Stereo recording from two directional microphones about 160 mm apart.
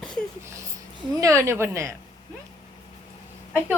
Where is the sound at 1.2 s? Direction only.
20° right (ahead or behind).